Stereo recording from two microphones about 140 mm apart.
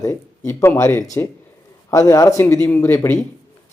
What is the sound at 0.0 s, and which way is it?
Speech, 20° left (ahead or behind).